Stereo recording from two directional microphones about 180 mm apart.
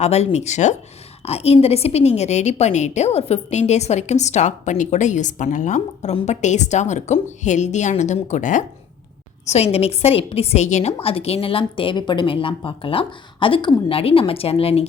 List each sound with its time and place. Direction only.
0.0 s a woman's voice: 35° left (ahead or behind)
9.5 s a woman's voice: 35° left (ahead or behind)